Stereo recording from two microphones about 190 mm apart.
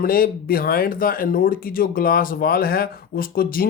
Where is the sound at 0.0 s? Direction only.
50° left (ahead or behind).